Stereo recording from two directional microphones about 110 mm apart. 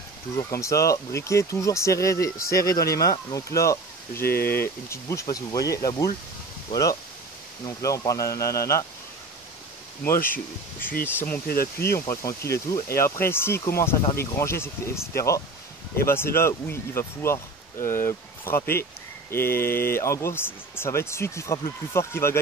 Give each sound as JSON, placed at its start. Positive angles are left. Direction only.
{"t": 0.4, "sound": "speech", "side_deg": 30}
{"t": 10.0, "sound": "speech", "side_deg": 15}